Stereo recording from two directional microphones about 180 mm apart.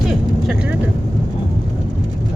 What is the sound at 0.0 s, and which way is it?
Vehicle, centre (ahead or behind).